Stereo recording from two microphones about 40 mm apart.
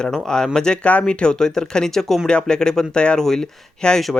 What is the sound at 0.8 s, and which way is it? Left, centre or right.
Speech, left.